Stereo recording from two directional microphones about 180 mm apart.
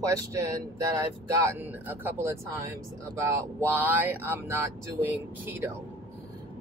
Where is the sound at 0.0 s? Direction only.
20° right (ahead or behind).